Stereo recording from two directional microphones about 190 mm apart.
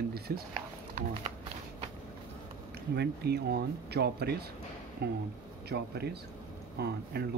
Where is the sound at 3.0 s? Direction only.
60° right (ahead or behind).